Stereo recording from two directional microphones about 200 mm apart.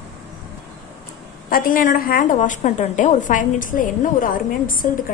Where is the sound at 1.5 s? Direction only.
45° left (ahead or behind).